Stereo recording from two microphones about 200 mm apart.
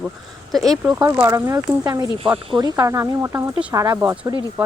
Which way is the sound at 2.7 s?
15° right (ahead or behind).